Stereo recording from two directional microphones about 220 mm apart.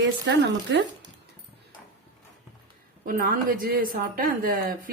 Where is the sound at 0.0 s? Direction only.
50° right (ahead or behind).